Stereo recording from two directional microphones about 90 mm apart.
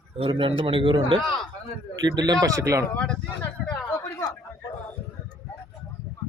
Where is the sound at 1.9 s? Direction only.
50° right (ahead or behind).